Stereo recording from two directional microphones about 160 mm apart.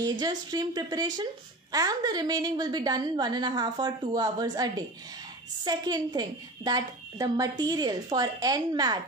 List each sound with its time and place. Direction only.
0.0 s a woman's voice: 25° right (ahead or behind)